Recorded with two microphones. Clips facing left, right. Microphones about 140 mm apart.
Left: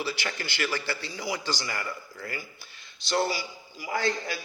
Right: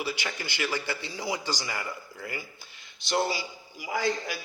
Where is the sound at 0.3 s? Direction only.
15° right (ahead or behind).